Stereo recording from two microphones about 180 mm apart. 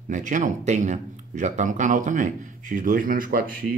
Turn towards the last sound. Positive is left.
turn(degrees=-50)  # may be behind; listen again after turning